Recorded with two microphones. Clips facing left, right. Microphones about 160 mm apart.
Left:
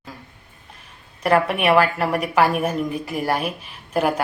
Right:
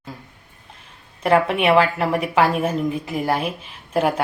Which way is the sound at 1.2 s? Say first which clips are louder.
Right 1 dB; 25° right (ahead or behind).